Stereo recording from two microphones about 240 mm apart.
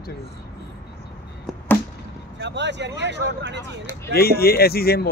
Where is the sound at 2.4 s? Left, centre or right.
Right.